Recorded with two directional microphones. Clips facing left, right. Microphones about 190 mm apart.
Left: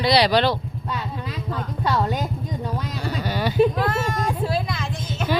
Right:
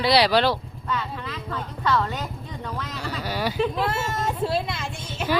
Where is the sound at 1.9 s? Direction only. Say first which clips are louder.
Left 1 dB; 40° left (ahead or behind).